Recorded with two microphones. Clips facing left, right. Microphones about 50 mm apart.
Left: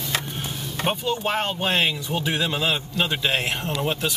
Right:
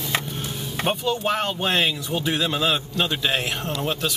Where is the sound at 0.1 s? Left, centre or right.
Centre.